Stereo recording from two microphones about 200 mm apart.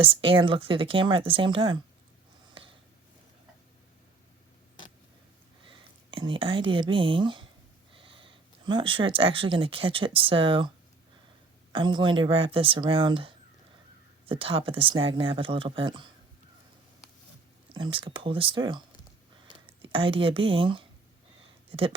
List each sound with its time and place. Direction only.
0.0 s speech: 25° right (ahead or behind)
5.6 s speech: 25° right (ahead or behind)
11.7 s speech: 25° right (ahead or behind)
17.7 s speech: 25° right (ahead or behind)